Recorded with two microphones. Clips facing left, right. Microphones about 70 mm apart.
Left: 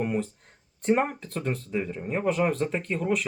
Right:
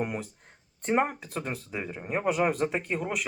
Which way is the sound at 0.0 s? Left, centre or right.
Centre.